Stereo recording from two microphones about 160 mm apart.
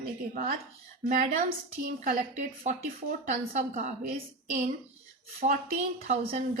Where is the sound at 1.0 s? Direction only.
60° right (ahead or behind).